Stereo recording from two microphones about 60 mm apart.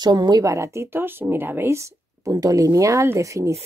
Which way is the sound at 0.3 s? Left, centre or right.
Right.